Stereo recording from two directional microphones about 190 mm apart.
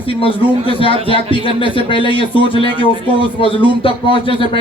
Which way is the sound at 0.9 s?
30° right (ahead or behind).